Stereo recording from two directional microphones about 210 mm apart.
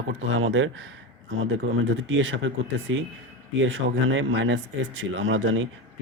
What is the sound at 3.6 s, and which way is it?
Speech, 60° right (ahead or behind).